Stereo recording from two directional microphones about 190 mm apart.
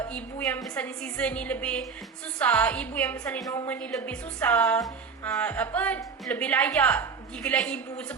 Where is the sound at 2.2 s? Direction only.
5° left (ahead or behind).